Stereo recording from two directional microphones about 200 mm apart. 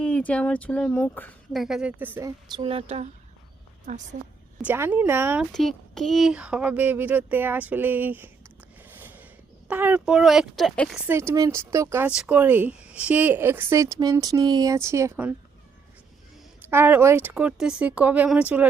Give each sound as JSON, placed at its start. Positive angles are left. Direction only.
{"t": 0.0, "sound": "speech", "side_deg": 5}
{"t": 1.5, "sound": "speech", "side_deg": 0}
{"t": 2.5, "sound": "a woman's voice", "side_deg": -30}
{"t": 4.6, "sound": "speech", "side_deg": -10}
{"t": 5.5, "sound": "speech", "side_deg": 5}
{"t": 8.9, "sound": "a sound", "side_deg": -10}
{"t": 9.6, "sound": "speech", "side_deg": -10}
{"t": 11.1, "sound": "speech", "side_deg": -10}
{"t": 16.6, "sound": "speech", "side_deg": -10}